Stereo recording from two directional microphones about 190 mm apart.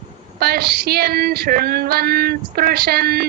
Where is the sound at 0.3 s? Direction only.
55° right (ahead or behind).